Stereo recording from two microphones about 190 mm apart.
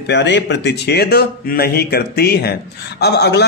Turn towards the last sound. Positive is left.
turn(degrees=60)  # may be behind; listen again after turning